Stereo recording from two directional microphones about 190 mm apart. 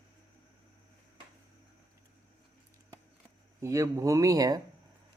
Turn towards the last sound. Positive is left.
turn(degrees=-20)  # may be behind; listen again after turning